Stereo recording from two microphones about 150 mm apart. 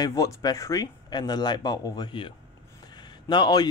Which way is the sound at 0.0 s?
25° left (ahead or behind).